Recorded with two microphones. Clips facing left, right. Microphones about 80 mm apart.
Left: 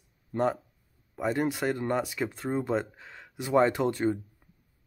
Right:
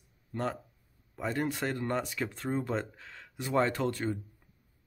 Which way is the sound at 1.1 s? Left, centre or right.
Centre.